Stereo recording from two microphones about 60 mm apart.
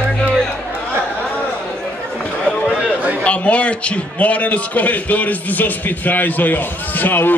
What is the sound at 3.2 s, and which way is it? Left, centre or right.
A man's voice, left.